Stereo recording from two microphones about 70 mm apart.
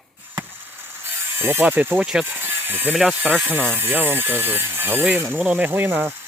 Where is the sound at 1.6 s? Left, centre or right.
Right.